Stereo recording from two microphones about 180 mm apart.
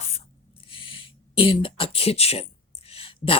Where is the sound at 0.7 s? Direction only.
30° left (ahead or behind).